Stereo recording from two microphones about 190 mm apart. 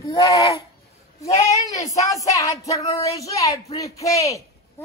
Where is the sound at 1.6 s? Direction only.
15° left (ahead or behind).